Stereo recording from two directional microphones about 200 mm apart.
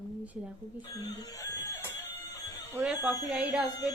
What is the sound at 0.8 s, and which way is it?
Speech, 20° left (ahead or behind).